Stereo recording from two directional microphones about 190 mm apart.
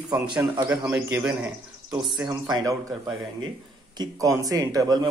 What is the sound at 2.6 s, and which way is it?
Speech, 20° right (ahead or behind).